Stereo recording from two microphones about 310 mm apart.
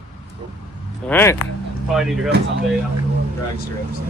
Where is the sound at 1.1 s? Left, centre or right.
Centre.